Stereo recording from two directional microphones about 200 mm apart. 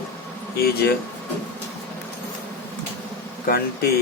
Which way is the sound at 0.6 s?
50° left (ahead or behind).